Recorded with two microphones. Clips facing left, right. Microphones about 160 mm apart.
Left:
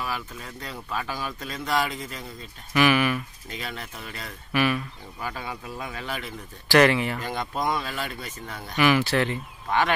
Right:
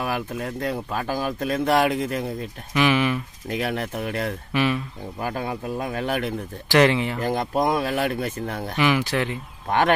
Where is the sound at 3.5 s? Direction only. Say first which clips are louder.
Right 11 dB; 60° right (ahead or behind).